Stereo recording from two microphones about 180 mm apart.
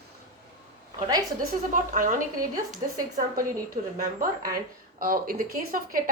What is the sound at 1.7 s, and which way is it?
Speech, 50° right (ahead or behind).